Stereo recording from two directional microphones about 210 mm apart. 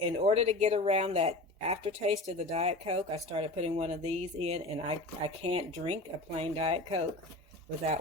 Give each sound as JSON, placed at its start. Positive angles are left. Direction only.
{"t": 0.0, "sound": "speech", "side_deg": -25}